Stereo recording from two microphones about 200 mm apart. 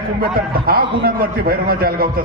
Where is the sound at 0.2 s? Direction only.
50° right (ahead or behind).